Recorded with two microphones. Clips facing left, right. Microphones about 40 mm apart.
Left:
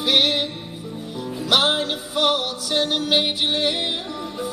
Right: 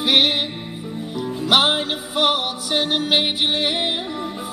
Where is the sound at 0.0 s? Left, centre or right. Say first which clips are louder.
Right 2 dB; centre.